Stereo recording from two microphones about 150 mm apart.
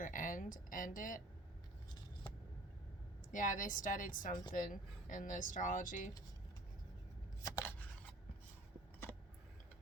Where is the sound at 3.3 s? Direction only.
60° left (ahead or behind).